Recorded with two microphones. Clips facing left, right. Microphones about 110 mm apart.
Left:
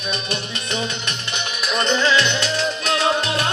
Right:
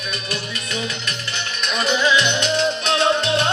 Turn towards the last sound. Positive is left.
turn(degrees=-25)  # may be behind; listen again after turning